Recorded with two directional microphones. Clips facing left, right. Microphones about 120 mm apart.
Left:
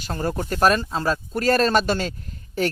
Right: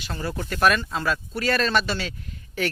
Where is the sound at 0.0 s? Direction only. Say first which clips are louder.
Left 5 dB; 45° left (ahead or behind).